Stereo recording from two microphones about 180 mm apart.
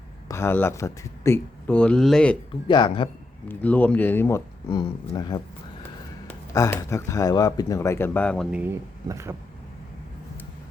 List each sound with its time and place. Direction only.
0.3 s speech: 15° left (ahead or behind)
2.6 s speech: 25° left (ahead or behind)
3.5 s speech: 10° left (ahead or behind)
6.5 s speech: 15° left (ahead or behind); by 8.7 s 5° right (ahead or behind)
9.0 s vehicle: 15° right (ahead or behind)